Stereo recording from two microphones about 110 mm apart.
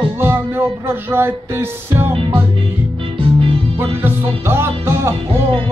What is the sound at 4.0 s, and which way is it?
Music, 20° right (ahead or behind).